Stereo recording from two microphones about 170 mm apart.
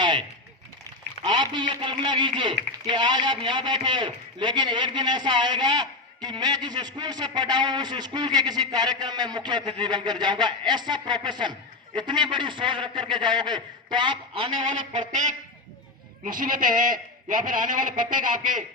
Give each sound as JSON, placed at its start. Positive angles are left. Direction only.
{"t": 0.0, "sound": "a sound", "side_deg": -30}
{"t": 1.2, "sound": "a man's voice", "side_deg": -25}
{"t": 15.1, "sound": "a man's voice", "side_deg": -45}